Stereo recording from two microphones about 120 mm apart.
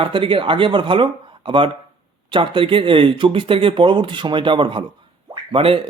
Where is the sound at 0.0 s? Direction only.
45° right (ahead or behind).